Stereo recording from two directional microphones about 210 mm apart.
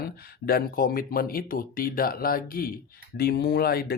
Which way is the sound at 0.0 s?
45° left (ahead or behind).